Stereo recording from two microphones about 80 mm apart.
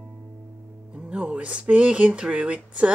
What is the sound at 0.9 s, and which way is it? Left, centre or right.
Speech, centre.